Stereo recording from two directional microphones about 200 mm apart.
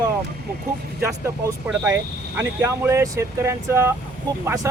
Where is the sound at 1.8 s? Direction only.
15° right (ahead or behind).